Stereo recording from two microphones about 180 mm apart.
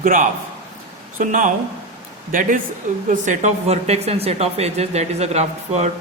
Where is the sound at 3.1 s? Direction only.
40° right (ahead or behind).